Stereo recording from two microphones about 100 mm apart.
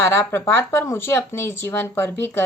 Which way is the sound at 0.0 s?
25° left (ahead or behind).